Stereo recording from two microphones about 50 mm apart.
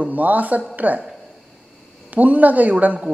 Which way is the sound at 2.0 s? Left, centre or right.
Right.